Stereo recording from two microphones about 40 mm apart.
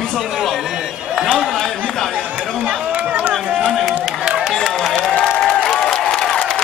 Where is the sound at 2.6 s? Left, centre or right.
Right.